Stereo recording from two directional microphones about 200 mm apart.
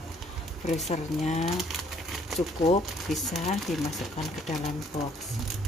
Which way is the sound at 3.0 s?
Centre (ahead or behind).